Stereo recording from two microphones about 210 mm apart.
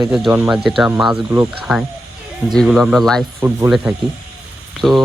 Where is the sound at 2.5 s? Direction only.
Centre (ahead or behind).